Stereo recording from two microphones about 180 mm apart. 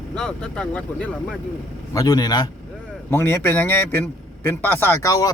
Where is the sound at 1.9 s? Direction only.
20° left (ahead or behind).